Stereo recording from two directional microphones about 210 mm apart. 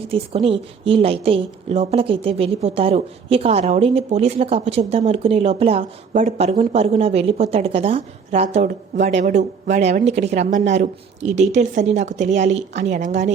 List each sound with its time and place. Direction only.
0.1 s a woman's voice: 25° right (ahead or behind)